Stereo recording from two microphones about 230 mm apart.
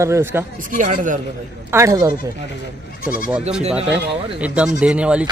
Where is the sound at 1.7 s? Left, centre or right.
Centre.